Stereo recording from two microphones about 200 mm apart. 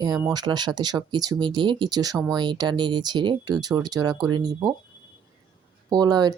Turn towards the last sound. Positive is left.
turn(degrees=-20)  # may be behind; listen again after turning